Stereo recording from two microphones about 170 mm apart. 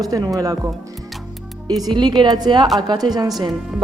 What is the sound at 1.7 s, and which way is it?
A man's voice, 25° right (ahead or behind).